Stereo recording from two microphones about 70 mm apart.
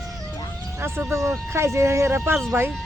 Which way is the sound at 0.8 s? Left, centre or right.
Right.